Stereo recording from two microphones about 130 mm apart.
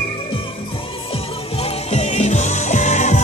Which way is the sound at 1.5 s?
50° left (ahead or behind).